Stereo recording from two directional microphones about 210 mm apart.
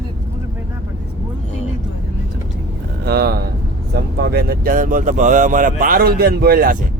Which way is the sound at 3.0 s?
50° right (ahead or behind).